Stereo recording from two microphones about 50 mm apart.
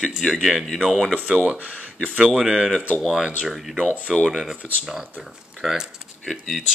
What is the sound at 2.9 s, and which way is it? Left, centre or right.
Speech, centre.